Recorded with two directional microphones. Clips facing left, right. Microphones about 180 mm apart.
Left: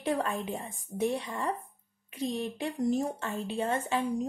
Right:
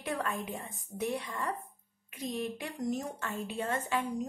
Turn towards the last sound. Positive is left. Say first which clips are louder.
# left 3 dB
turn(degrees=25)  # may be behind; listen again after turning